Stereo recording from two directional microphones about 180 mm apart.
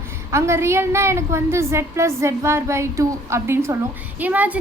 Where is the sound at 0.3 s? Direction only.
15° right (ahead or behind).